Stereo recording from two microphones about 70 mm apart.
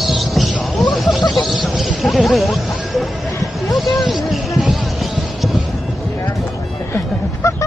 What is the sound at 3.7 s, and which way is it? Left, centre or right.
Vehicle, centre.